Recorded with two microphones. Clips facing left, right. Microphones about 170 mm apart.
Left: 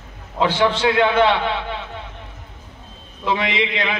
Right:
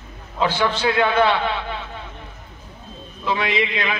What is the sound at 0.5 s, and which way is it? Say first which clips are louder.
Speech: left 4 dB; 20° left (ahead or behind).